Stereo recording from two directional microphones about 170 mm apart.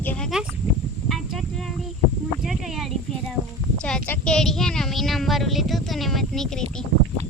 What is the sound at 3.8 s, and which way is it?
Speech, 10° left (ahead or behind).